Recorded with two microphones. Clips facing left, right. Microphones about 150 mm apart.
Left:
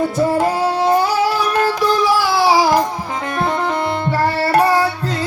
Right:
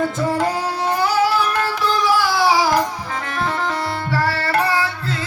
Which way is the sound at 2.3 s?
35° left (ahead or behind).